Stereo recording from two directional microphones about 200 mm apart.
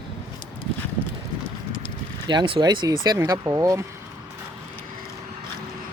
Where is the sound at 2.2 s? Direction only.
20° right (ahead or behind).